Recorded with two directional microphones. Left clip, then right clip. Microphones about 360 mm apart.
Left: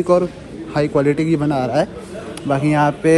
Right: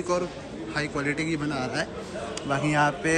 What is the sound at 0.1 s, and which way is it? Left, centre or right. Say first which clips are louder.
A man's voice: left 11 dB; centre.